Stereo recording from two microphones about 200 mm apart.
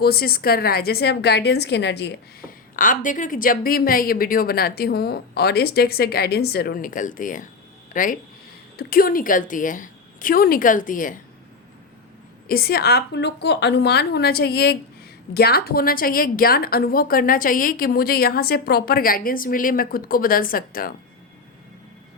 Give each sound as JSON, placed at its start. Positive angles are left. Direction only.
{"t": 0.0, "sound": "a woman's voice", "side_deg": 50}
{"t": 12.5, "sound": "a woman's voice", "side_deg": 50}